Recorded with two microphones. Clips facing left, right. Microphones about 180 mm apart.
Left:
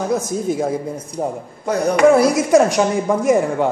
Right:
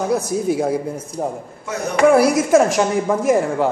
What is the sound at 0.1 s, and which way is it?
Speech, 10° right (ahead or behind).